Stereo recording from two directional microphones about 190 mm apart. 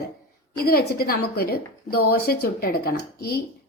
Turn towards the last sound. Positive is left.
turn(degrees=55)  # may be behind; listen again after turning